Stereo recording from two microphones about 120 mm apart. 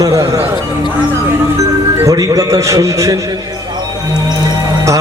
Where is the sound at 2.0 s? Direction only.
30° right (ahead or behind).